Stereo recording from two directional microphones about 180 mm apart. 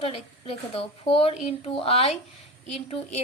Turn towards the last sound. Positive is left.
turn(degrees=35)  # may be behind; listen again after turning